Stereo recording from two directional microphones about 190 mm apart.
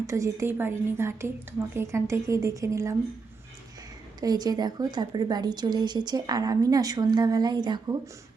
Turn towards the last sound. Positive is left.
turn(degrees=-20)  # may be behind; listen again after turning